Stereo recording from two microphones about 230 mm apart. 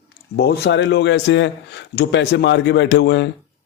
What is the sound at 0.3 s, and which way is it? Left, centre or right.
A man's voice, left.